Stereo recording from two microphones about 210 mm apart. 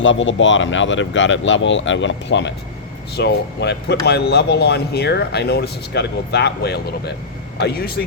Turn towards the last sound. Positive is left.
turn(degrees=45)  # may be behind; listen again after turning